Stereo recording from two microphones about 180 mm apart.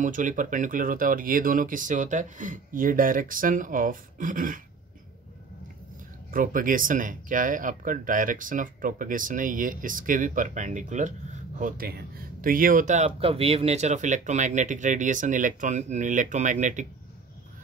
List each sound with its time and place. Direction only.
0.0 s speech: 45° right (ahead or behind)
6.3 s speech: 50° right (ahead or behind)